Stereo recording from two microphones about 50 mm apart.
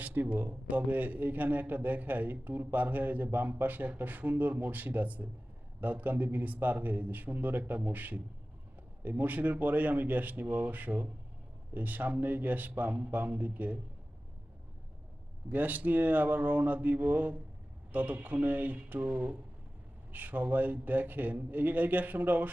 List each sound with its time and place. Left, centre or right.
0.0 s a man's voice: right
15.4 s a man's voice: right